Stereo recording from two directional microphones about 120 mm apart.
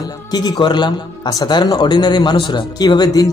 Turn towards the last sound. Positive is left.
turn(degrees=35)  # may be behind; listen again after turning